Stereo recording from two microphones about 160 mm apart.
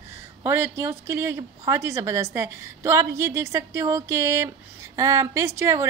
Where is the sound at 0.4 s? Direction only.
15° right (ahead or behind).